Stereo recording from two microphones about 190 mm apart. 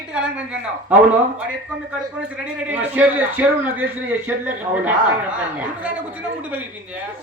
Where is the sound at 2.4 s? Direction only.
10° right (ahead or behind).